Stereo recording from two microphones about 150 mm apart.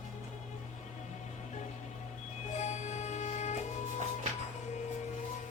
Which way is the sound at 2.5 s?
50° left (ahead or behind).